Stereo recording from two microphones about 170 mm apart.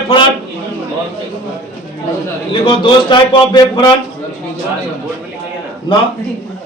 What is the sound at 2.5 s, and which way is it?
A man's voice, 30° left (ahead or behind).